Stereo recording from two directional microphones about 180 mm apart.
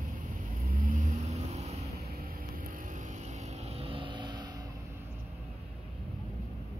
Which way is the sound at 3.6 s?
30° right (ahead or behind).